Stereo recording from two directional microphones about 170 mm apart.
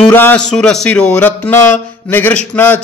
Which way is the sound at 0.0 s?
10° left (ahead or behind).